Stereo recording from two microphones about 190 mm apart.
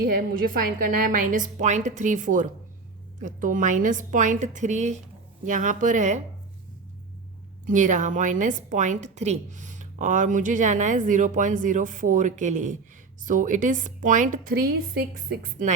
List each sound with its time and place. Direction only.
0.0 s a woman's voice: 50° right (ahead or behind)
7.7 s a woman's voice: 40° right (ahead or behind)